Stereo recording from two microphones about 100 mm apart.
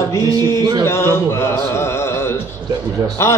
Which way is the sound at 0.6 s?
45° right (ahead or behind).